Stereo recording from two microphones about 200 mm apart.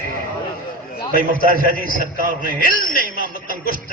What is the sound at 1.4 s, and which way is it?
A man's voice, 45° right (ahead or behind).